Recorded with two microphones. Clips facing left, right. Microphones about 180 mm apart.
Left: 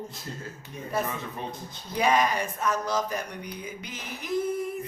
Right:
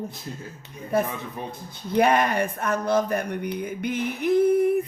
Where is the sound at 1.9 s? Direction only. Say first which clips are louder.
Right 4 dB; 60° right (ahead or behind).